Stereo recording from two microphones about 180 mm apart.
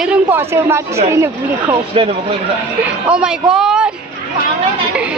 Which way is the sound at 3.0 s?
5° right (ahead or behind).